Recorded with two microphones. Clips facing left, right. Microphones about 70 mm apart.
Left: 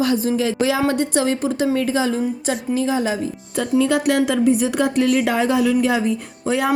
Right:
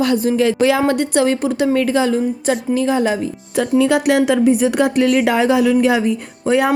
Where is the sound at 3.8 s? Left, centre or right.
Right.